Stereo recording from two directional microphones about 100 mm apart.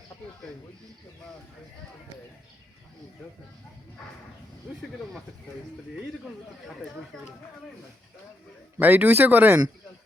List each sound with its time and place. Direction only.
8.8 s speech: 15° right (ahead or behind)